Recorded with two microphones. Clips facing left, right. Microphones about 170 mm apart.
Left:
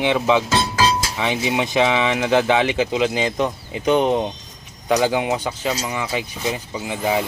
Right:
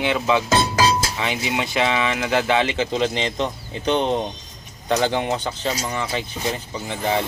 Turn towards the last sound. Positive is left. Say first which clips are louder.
# left 2 dB
turn(degrees=5)  # may be behind; listen again after turning